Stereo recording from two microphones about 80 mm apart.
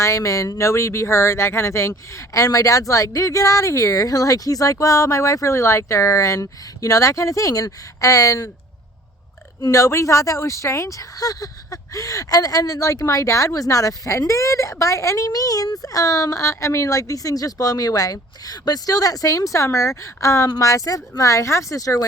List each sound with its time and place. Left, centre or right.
0.0 s speech: left
9.6 s speech: left
15.3 s speech: left